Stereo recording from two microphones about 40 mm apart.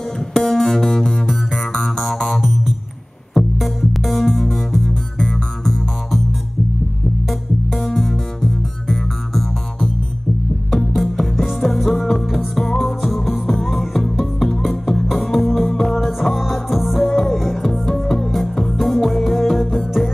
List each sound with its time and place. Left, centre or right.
0.3 s music: centre
7.2 s music: centre